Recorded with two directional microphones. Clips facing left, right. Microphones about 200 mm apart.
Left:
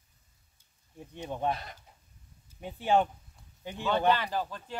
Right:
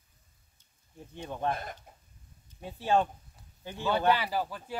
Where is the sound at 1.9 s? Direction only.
50° right (ahead or behind).